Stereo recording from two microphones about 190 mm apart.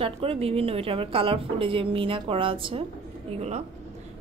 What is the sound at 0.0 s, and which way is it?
A woman's voice, 30° right (ahead or behind).